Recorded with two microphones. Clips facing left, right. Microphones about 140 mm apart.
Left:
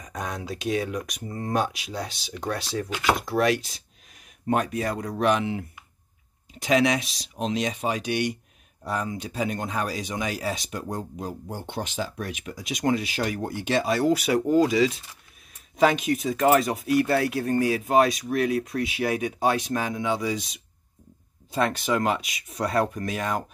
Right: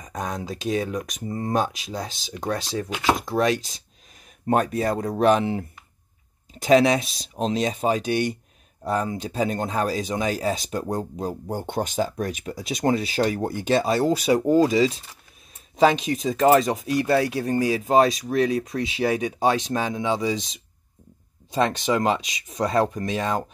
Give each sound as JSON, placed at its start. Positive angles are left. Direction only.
{"t": 0.0, "sound": "speech", "side_deg": -25}
{"t": 4.5, "sound": "speech", "side_deg": -35}